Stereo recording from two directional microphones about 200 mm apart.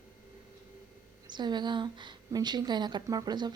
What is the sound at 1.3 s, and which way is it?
A woman's voice, 20° right (ahead or behind).